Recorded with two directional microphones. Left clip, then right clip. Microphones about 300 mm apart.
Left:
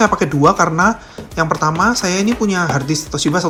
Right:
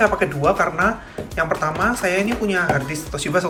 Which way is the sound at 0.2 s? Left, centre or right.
Centre.